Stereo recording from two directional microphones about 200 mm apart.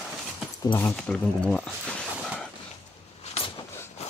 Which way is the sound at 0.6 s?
15° left (ahead or behind).